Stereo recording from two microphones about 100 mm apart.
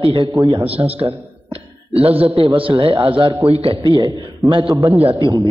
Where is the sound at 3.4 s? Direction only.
90° right.